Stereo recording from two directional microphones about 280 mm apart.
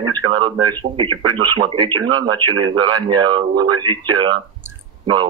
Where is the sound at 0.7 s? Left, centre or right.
Centre.